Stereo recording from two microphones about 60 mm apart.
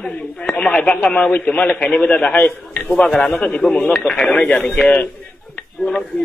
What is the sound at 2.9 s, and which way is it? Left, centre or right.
Speech, centre.